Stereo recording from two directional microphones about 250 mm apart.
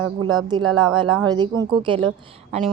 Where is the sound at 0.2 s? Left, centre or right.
Centre.